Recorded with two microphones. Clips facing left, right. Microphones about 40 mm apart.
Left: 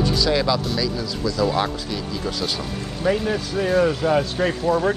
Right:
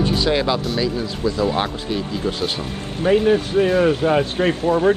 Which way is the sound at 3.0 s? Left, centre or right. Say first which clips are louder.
Right 6 dB; right.